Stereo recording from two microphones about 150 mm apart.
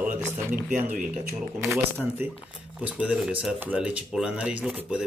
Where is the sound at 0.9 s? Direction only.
60° right (ahead or behind).